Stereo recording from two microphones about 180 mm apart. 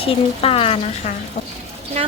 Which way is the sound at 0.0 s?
30° left (ahead or behind).